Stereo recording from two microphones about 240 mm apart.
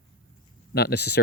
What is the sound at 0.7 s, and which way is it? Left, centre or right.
Speech, left.